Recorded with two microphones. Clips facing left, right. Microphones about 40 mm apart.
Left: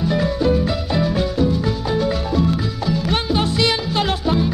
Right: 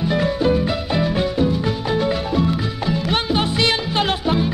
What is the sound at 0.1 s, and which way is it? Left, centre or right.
Music, right.